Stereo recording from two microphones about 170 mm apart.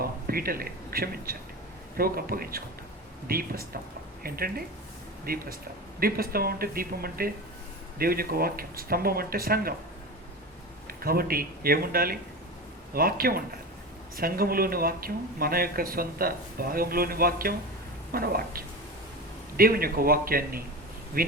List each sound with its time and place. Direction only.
0.0 s speech: 60° right (ahead or behind)
10.8 s speech: 60° right (ahead or behind)